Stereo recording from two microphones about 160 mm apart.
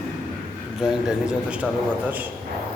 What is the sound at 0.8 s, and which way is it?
A man's voice, 5° right (ahead or behind).